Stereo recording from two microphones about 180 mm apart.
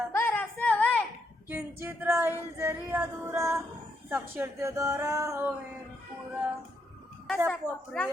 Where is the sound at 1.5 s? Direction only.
10° right (ahead or behind).